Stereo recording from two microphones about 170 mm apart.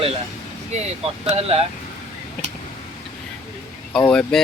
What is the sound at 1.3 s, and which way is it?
Speech, 35° right (ahead or behind).